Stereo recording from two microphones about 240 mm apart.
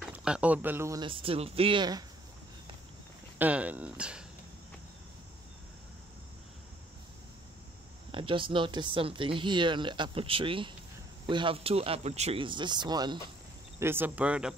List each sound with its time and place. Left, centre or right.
0.0 s speech: centre
3.3 s speech: centre
8.1 s speech: right; by 14.5 s centre